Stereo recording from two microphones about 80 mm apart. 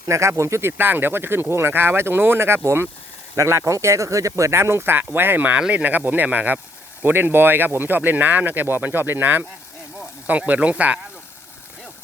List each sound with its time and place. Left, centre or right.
0.1 s speech: right
0.8 s speech: right